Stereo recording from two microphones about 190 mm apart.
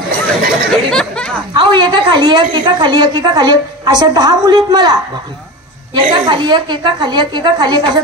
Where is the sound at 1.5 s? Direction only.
25° right (ahead or behind).